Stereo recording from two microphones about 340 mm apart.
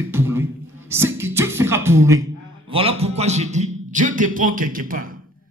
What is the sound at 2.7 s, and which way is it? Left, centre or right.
A man's voice, centre.